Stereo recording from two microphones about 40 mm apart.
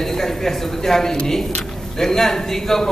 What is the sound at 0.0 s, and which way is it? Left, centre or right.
Speech, centre.